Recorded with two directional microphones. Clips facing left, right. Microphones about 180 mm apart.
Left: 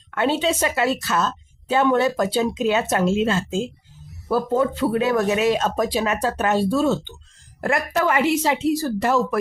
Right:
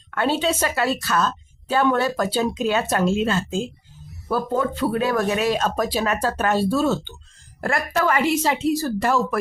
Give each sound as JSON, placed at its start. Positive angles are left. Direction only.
{"t": 0.1, "sound": "a woman's voice", "side_deg": 20}